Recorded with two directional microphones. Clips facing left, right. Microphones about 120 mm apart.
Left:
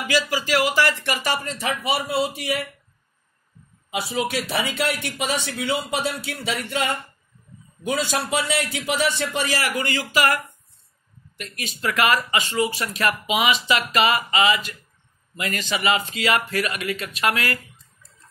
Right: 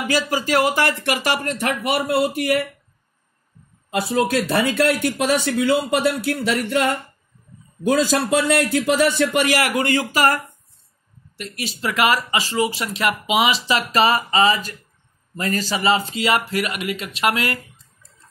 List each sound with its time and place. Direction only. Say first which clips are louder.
0.3 s speech: right 3 dB; 50° right (ahead or behind); by 2.6 s 90° right
4.1 s speech: right 6 dB; 85° right
7.8 s speech: right 6 dB; 90° right; by 10.4 s 45° right (ahead or behind)
11.3 s speech: right 4 dB; 30° right (ahead or behind)